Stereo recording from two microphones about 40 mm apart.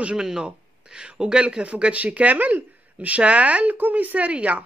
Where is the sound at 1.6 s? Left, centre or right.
Right.